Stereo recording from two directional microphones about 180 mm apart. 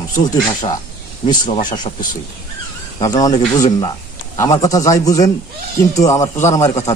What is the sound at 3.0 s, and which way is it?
A man's voice, 20° left (ahead or behind).